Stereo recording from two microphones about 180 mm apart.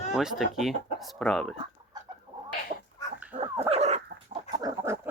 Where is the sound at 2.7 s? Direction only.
45° right (ahead or behind).